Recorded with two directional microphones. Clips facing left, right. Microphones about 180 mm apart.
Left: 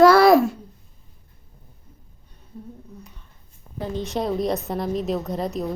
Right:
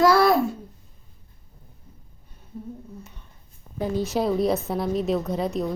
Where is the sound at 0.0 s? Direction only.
70° left (ahead or behind).